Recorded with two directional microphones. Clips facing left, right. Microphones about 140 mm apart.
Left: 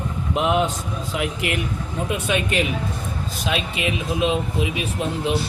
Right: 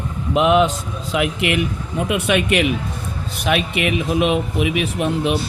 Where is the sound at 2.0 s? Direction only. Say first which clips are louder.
Right 5 dB; 75° right (ahead or behind).